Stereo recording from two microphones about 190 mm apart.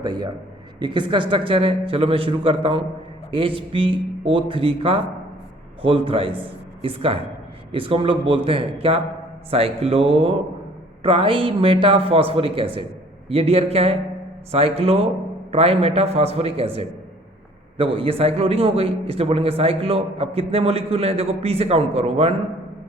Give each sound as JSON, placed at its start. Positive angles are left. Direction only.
{"t": 0.0, "sound": "a man's voice", "side_deg": -25}